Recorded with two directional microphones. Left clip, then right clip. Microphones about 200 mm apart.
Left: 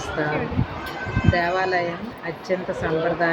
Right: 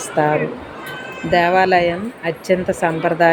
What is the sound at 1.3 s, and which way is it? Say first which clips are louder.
Speech: right 9 dB; 50° right (ahead or behind).